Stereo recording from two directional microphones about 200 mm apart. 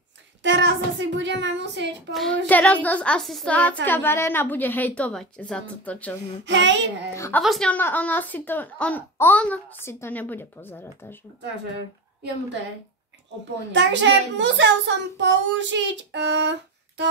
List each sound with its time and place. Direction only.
0.4 s a sound: 60° right (ahead or behind)
0.9 s a child's voice: 65° right (ahead or behind)
2.1 s a woman's voice: 5° left (ahead or behind)
6.4 s a child's voice: 65° right (ahead or behind)
7.2 s speech: 10° left (ahead or behind)
13.7 s a child's voice: 60° right (ahead or behind)